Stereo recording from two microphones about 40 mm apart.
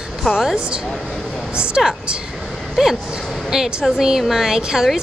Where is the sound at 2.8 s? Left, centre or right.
Centre.